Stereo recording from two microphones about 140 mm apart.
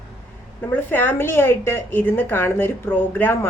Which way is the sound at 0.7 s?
15° left (ahead or behind).